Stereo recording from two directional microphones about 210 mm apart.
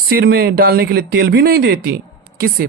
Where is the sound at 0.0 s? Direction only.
45° right (ahead or behind).